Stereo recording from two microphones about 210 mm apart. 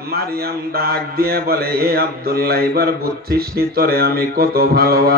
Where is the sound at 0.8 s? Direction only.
45° right (ahead or behind).